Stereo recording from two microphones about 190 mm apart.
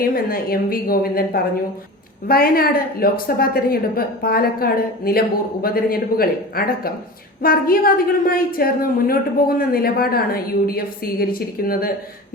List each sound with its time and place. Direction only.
0.0 s a woman's voice: 50° left (ahead or behind)